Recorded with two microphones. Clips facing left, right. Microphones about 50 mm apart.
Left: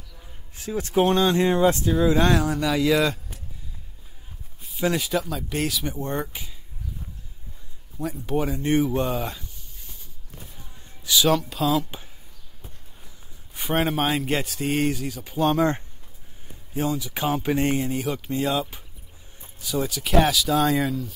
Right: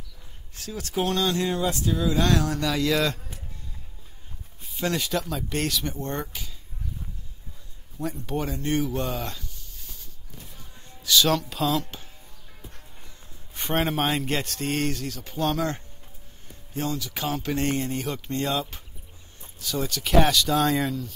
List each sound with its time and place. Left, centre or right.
0.6 s speech: left
4.6 s speech: centre
8.0 s speech: centre
8.6 s speech: centre
9.1 s a sound: centre
11.1 s speech: centre
13.6 s speech: centre; by 15.8 s left
16.7 s speech: centre